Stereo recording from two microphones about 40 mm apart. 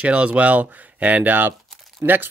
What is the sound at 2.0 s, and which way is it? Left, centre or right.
Speech, right.